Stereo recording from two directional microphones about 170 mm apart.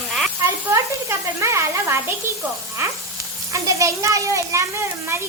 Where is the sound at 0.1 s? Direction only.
Centre (ahead or behind).